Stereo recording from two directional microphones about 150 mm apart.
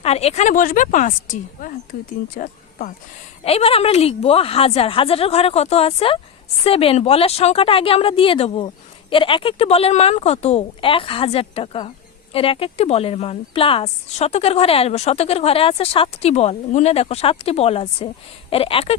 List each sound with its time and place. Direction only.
0.0 s a woman's voice: 45° left (ahead or behind); by 2.9 s 65° left (ahead or behind)
3.4 s speech: 40° left (ahead or behind)